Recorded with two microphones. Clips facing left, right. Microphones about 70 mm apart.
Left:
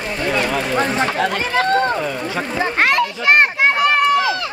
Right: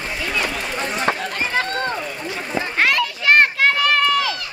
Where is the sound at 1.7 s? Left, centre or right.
Left.